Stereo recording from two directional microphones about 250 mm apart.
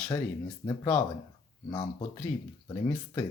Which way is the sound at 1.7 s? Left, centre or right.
Centre.